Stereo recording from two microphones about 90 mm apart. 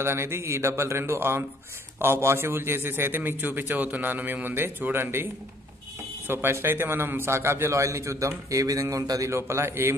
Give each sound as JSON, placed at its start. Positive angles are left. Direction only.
{"t": 0.0, "sound": "a man's voice", "side_deg": -30}